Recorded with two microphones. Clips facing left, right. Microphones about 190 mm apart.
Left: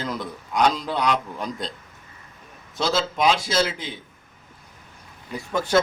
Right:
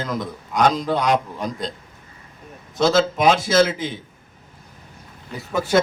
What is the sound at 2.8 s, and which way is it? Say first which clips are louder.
Speech: right 5 dB; 50° right (ahead or behind).